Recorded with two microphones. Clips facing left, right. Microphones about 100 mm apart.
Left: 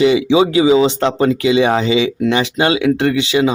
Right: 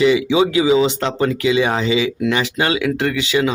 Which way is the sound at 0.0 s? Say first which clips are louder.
Left 2 dB; 30° left (ahead or behind).